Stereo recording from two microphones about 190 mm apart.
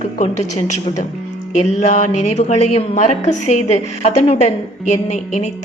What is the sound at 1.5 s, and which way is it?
A woman's voice, 40° left (ahead or behind).